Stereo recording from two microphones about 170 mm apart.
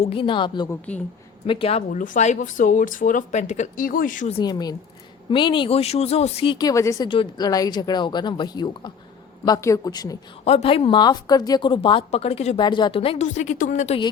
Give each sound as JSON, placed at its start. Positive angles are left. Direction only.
{"t": 0.0, "sound": "speech", "side_deg": 30}
{"t": 1.9, "sound": "speech", "side_deg": 50}
{"t": 4.3, "sound": "speech", "side_deg": 30}
{"t": 10.4, "sound": "speech", "side_deg": 35}
{"t": 12.5, "sound": "speech", "side_deg": 25}